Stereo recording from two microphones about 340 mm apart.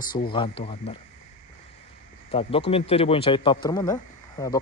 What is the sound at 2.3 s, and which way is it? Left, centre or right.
Speech, centre.